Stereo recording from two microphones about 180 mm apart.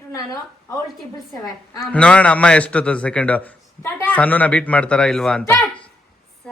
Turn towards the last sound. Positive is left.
turn(degrees=5)  # may be behind; listen again after turning